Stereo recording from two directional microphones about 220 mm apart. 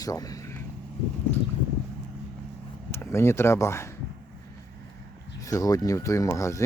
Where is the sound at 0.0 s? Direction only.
15° left (ahead or behind).